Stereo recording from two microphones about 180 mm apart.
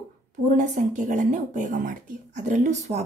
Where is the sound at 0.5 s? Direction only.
45° right (ahead or behind).